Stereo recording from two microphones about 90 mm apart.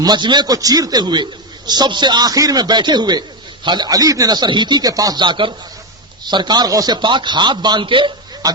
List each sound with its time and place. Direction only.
0.0 s a man's voice: 55° right (ahead or behind)
5.2 s a man's voice: 60° right (ahead or behind)